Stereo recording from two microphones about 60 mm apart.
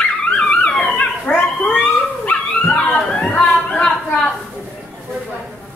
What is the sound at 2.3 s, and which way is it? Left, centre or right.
Dog, left.